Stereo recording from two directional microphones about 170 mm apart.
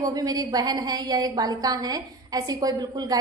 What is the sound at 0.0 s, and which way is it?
A woman's voice, 20° right (ahead or behind).